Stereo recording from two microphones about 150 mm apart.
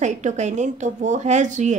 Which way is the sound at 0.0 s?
50° right (ahead or behind).